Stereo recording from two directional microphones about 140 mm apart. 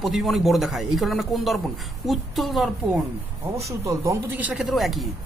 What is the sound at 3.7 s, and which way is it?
Speech, 20° right (ahead or behind).